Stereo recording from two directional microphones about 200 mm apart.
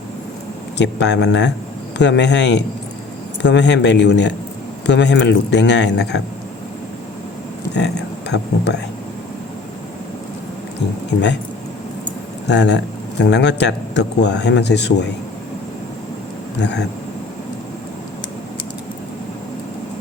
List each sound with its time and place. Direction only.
0.8 s speech: 60° left (ahead or behind)
7.7 s speech: 60° left (ahead or behind)
12.5 s speech: 60° left (ahead or behind)
16.6 s speech: 60° left (ahead or behind)